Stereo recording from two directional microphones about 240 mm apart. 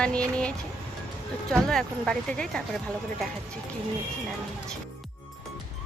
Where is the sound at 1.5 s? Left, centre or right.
Centre.